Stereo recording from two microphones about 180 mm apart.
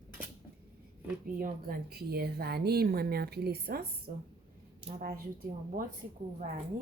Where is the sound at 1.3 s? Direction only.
50° right (ahead or behind).